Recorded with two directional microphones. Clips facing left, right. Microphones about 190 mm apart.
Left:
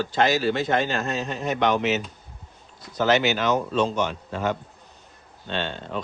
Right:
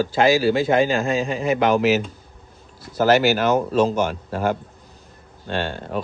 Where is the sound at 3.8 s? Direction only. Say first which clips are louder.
Right 6 dB; 5° right (ahead or behind).